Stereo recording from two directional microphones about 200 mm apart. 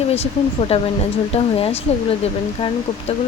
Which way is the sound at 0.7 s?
30° left (ahead or behind).